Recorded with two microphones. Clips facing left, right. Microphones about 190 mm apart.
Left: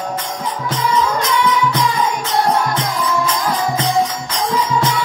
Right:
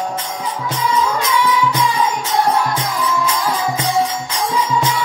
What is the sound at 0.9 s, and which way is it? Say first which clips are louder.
Music: even; 10° right (ahead or behind).